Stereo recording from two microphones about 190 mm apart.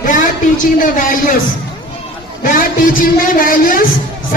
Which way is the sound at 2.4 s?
45° left (ahead or behind).